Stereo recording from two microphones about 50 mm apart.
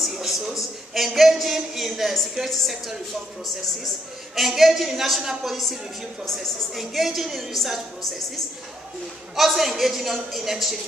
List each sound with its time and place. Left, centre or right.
0.0 s a woman's voice: centre
4.4 s a woman's voice: centre
9.3 s a woman's voice: centre